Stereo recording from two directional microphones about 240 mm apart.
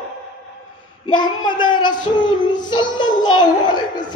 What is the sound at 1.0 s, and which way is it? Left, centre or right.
A child's voice, centre.